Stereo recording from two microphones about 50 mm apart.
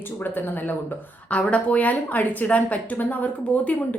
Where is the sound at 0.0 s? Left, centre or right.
Left.